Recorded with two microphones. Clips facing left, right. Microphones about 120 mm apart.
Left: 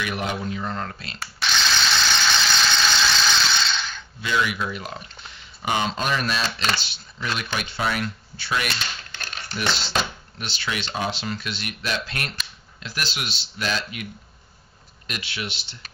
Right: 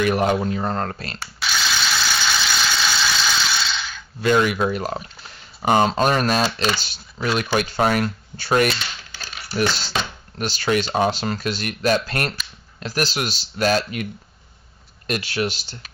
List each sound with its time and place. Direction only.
0.0 s speech: 45° right (ahead or behind)
1.2 s engine: 5° right (ahead or behind)
4.2 s speech: 45° right (ahead or behind)
9.1 s typewriter: 5° right (ahead or behind)
9.7 s speech: 5° right (ahead or behind)
10.4 s speech: 40° right (ahead or behind)
15.0 s speech: 45° right (ahead or behind)